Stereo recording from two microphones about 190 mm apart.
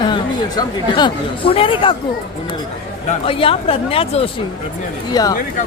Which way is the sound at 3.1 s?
30° left (ahead or behind).